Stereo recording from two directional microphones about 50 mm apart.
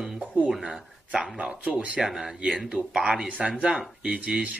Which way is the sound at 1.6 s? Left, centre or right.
Right.